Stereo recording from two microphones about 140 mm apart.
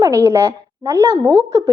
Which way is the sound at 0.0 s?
20° right (ahead or behind).